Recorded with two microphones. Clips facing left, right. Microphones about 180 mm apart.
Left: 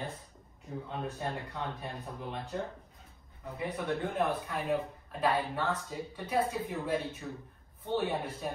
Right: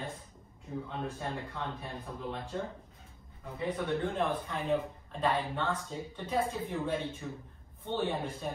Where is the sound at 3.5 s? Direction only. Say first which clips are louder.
Right 2 dB; 10° left (ahead or behind).